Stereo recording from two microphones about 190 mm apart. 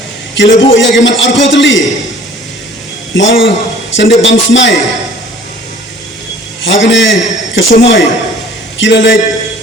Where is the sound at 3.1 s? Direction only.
80° left.